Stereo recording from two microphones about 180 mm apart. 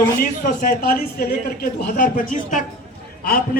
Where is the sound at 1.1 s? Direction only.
50° left (ahead or behind).